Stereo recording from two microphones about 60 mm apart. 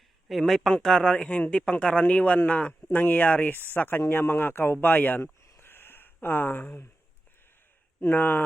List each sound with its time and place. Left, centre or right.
0.3 s speech: centre; by 5.3 s left
5.6 s a sound: left
6.2 s speech: left
8.0 s speech: left